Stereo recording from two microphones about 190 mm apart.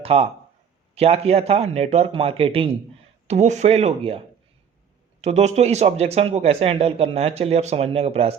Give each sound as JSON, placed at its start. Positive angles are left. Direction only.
{"t": 0.0, "sound": "speech", "side_deg": -30}
{"t": 5.2, "sound": "speech", "side_deg": -35}